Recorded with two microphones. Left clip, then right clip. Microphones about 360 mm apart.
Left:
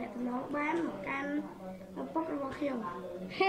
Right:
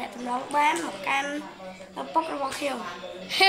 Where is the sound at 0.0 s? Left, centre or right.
Right.